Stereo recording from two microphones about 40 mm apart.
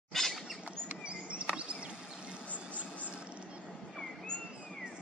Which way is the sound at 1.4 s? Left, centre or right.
Right.